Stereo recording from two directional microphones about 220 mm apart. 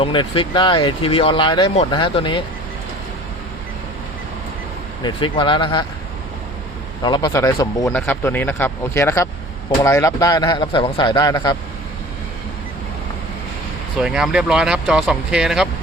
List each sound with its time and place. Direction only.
0.0 s speech: 20° left (ahead or behind)
5.0 s speech: 20° left (ahead or behind)
7.0 s speech: 20° left (ahead or behind)
14.0 s speech: 5° right (ahead or behind)